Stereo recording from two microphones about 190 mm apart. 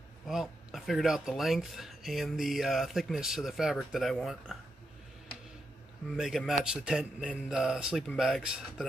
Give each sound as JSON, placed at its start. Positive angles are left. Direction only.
{"t": 0.3, "sound": "speech", "side_deg": 0}
{"t": 6.1, "sound": "speech", "side_deg": 0}